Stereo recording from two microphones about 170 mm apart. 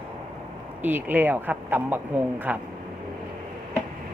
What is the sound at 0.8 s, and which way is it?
Speech, 10° right (ahead or behind).